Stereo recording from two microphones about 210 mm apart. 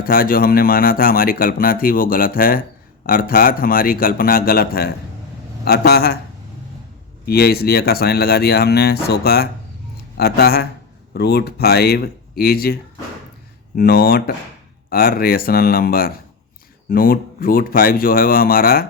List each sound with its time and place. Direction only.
0.0 s speech: 45° left (ahead or behind)
7.3 s speech: 45° left (ahead or behind)
13.7 s speech: 45° left (ahead or behind)